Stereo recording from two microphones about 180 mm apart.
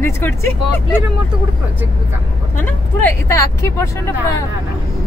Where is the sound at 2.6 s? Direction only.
10° left (ahead or behind).